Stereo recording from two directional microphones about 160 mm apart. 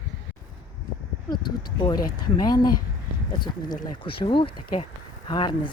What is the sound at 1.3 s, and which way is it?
Speech, 25° left (ahead or behind).